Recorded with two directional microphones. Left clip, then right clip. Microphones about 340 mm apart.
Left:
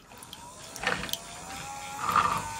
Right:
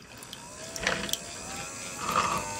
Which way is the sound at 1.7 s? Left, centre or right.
Centre.